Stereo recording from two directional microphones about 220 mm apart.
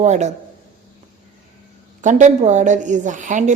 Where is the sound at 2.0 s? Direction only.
35° right (ahead or behind).